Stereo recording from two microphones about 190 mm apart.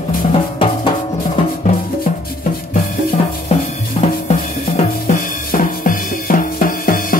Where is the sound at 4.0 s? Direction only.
35° left (ahead or behind).